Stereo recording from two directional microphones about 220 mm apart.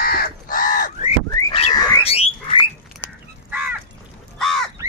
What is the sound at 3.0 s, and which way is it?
Crow, 10° left (ahead or behind).